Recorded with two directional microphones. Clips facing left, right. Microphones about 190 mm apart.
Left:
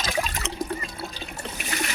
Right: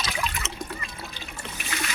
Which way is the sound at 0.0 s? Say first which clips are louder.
Left 3 dB; 40° left (ahead or behind).